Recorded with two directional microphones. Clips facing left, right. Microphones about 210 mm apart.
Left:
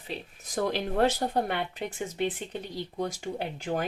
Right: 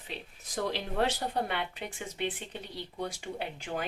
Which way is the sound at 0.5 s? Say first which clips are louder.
Left 4 dB; 45° left (ahead or behind).